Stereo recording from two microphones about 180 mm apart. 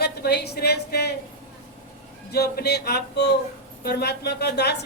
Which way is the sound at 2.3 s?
65° left (ahead or behind).